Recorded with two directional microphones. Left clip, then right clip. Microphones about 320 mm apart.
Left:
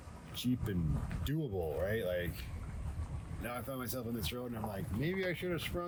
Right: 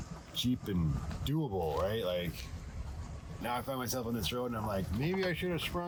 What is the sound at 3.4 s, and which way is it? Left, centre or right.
Speech, centre.